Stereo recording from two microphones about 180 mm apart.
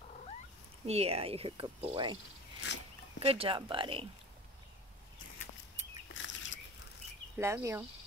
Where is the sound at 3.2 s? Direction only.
30° right (ahead or behind).